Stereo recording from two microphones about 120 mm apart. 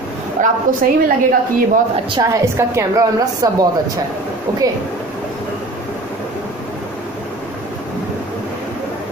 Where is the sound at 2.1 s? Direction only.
25° right (ahead or behind).